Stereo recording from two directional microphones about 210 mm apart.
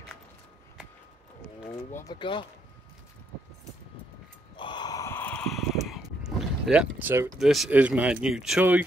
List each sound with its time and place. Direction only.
2.0 s speech: 20° left (ahead or behind)
4.6 s a sound: 20° left (ahead or behind); by 7.3 s 10° right (ahead or behind)
7.3 s speech: centre (ahead or behind)